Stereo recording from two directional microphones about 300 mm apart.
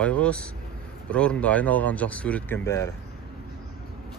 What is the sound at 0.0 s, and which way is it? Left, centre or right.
Speech, centre.